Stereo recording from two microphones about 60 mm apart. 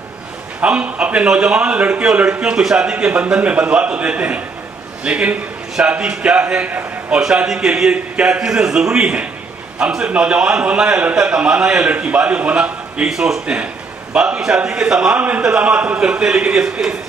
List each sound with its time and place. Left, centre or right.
0.6 s a man's voice: right
7.1 s a man's voice: centre
13.1 s a man's voice: centre
15.1 s a man's voice: right